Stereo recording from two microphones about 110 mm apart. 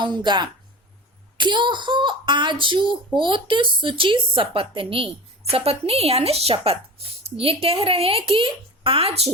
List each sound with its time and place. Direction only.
0.0 s speech: 45° right (ahead or behind); by 9.3 s 65° right (ahead or behind)